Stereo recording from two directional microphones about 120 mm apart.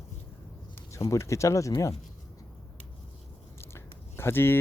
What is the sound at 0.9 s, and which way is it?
Speech, 25° left (ahead or behind).